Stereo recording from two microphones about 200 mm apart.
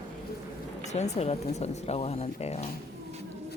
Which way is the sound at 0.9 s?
30° left (ahead or behind).